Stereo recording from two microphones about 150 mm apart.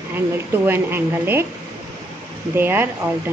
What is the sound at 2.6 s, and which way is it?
Speech, 15° right (ahead or behind).